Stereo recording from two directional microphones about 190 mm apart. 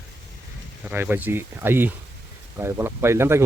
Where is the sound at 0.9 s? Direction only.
10° right (ahead or behind).